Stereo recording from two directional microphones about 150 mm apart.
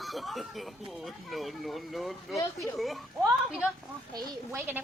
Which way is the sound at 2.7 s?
Centre (ahead or behind).